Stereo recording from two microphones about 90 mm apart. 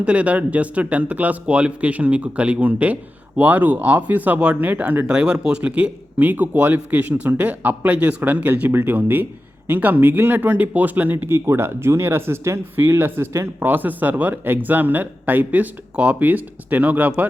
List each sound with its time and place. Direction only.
0.0 s speech: 15° right (ahead or behind)